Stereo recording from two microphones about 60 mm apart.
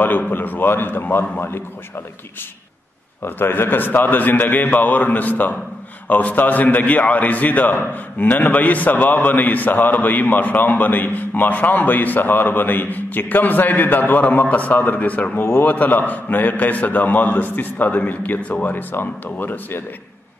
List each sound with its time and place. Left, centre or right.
0.0 s a man's voice: left
3.3 s a man's voice: left